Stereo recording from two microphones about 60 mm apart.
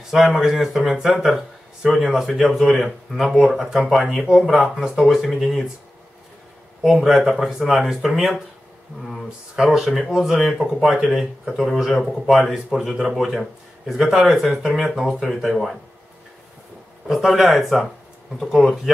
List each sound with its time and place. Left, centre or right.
0.1 s speech: centre
6.8 s speech: centre
17.1 s speech: centre